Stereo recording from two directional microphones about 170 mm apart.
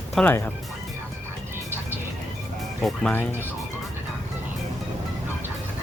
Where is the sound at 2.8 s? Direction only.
5° left (ahead or behind).